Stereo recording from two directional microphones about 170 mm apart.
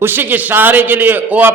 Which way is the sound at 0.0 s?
10° right (ahead or behind).